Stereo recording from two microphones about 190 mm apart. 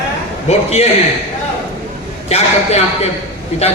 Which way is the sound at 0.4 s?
35° left (ahead or behind).